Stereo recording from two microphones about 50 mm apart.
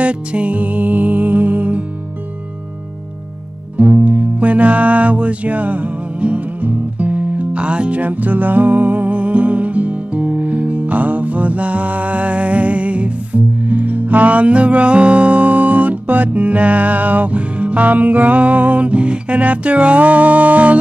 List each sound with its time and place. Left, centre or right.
0.0 s music: right
3.7 s music: right